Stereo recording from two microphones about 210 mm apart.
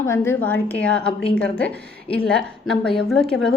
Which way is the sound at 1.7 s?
50° right (ahead or behind).